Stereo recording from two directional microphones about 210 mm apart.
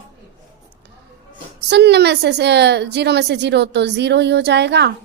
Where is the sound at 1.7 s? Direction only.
55° right (ahead or behind).